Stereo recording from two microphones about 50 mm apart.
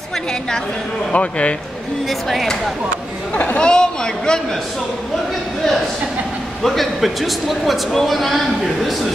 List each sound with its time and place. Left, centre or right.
1.1 s speech: left
2.0 s speech: centre
3.3 s speech: left
3.6 s speech: centre
6.6 s speech: centre